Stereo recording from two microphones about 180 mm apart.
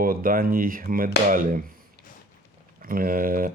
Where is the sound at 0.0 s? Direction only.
50° right (ahead or behind).